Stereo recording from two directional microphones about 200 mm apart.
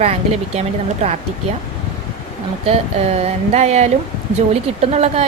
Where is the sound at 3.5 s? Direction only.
35° right (ahead or behind).